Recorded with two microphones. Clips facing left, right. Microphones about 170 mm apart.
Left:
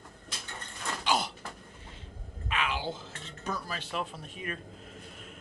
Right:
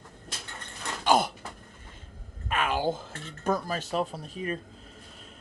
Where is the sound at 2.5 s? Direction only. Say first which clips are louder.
Right 6 dB; 45° right (ahead or behind).